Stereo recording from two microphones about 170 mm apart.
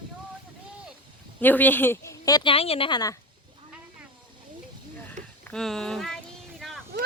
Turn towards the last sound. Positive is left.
turn(degrees=-75)  # may be behind; listen again after turning